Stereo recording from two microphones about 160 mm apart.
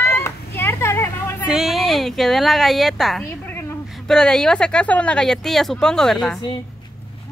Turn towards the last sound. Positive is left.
turn(degrees=5)  # may be behind; listen again after turning